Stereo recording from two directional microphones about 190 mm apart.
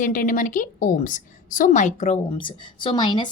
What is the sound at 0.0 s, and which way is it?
A woman's voice, 45° left (ahead or behind).